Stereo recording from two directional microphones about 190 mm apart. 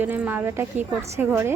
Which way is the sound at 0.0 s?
10° right (ahead or behind).